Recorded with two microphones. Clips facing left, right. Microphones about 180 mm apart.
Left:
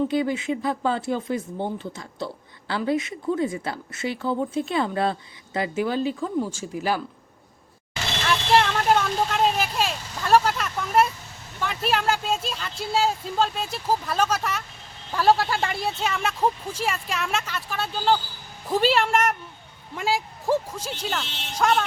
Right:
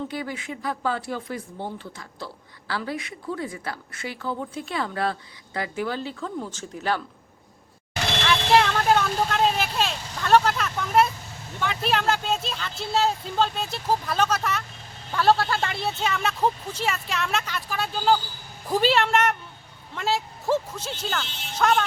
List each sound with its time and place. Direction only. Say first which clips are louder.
0.1 s speech: left 8 dB; 20° left (ahead or behind)
8.3 s speech: even; centre (ahead or behind)